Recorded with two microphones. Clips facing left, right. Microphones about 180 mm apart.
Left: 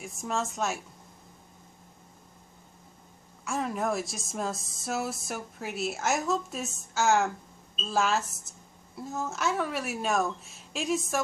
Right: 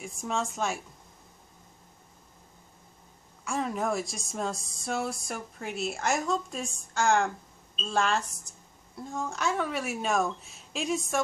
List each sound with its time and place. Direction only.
0.0 s speech: centre (ahead or behind)
3.4 s a woman's voice: centre (ahead or behind)